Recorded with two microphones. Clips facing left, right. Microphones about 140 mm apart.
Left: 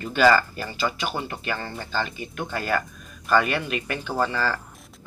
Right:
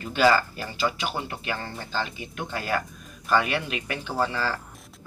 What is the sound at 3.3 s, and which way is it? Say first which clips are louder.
Speech: left 2 dB; 50° left (ahead or behind).